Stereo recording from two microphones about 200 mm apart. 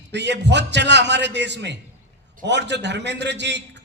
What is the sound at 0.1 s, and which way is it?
A man's voice, 60° right (ahead or behind).